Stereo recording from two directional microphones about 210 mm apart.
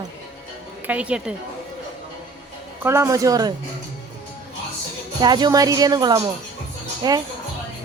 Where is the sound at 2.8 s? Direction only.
10° right (ahead or behind).